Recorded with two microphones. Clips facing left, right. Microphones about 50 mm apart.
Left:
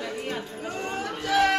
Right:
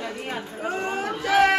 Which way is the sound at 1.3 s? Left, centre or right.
Right.